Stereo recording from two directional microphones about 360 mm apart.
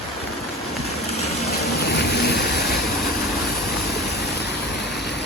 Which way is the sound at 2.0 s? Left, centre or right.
Left.